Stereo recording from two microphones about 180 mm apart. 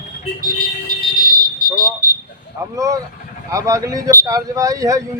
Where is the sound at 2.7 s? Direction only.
20° right (ahead or behind).